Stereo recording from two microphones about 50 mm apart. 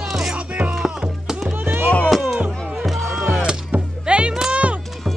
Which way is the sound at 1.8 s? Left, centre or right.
Left.